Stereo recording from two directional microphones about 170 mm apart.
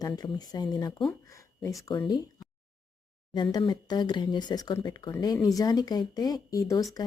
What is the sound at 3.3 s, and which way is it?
Speech, 25° left (ahead or behind).